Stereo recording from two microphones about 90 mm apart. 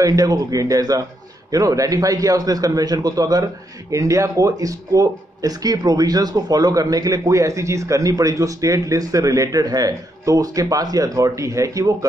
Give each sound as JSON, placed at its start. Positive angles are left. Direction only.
{"t": 0.0, "sound": "a man's voice", "side_deg": -40}